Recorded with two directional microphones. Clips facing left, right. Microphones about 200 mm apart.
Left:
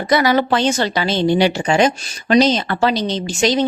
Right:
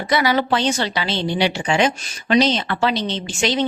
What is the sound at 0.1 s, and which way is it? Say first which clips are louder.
A woman's voice: left 3 dB; 45° left (ahead or behind).